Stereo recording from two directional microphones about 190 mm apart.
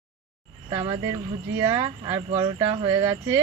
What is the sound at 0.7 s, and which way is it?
Speech, 25° right (ahead or behind).